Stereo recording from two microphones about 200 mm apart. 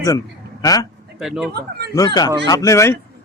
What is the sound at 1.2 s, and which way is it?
Speech, centre (ahead or behind).